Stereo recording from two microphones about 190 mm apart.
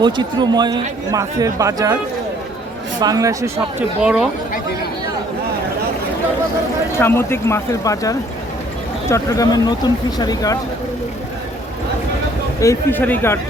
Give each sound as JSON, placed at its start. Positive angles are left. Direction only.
{"t": 0.0, "sound": "speech", "side_deg": -25}
{"t": 3.0, "sound": "speech", "side_deg": -20}
{"t": 7.0, "sound": "speech", "side_deg": 10}
{"t": 12.5, "sound": "speech", "side_deg": 15}